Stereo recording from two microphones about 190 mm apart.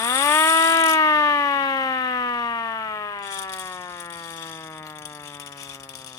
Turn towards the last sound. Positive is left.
turn(degrees=15)  # may be behind; listen again after turning